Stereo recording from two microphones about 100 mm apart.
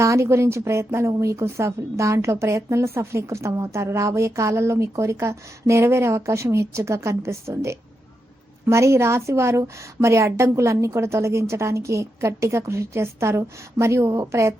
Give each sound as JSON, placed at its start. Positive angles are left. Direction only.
{"t": 0.0, "sound": "speech", "side_deg": -30}